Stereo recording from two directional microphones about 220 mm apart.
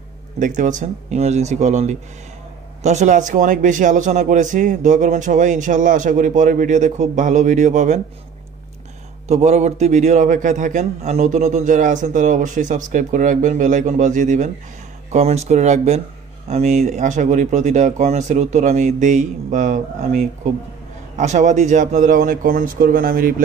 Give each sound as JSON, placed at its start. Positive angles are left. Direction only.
{"t": 0.6, "sound": "a man's voice", "side_deg": -35}
{"t": 9.3, "sound": "a man's voice", "side_deg": -30}